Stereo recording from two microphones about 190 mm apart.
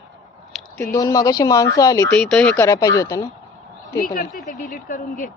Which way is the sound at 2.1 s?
5° left (ahead or behind).